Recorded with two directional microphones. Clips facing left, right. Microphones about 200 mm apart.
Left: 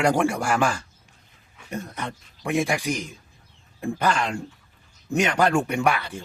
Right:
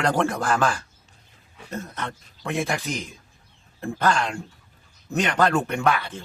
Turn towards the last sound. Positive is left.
turn(degrees=10)  # may be behind; listen again after turning